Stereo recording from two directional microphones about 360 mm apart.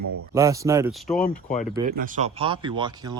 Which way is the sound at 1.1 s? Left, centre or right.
Left.